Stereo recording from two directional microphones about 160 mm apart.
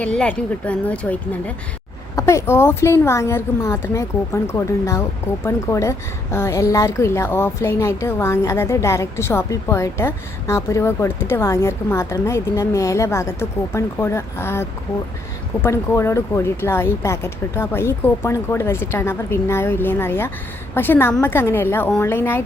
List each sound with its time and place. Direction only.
0.0 s a woman's voice: 5° left (ahead or behind)